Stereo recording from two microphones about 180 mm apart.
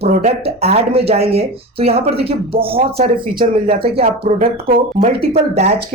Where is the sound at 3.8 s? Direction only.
30° right (ahead or behind).